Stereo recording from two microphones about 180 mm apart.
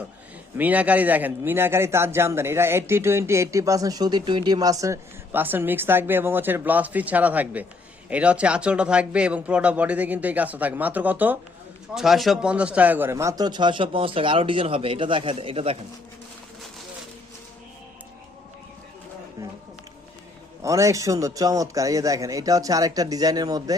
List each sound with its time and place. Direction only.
0.5 s a man's voice: 10° right (ahead or behind); by 15.8 s 30° right (ahead or behind)
20.6 s speech: 15° right (ahead or behind)